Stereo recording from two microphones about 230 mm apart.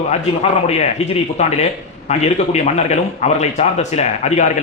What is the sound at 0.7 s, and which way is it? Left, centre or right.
A man's voice, left.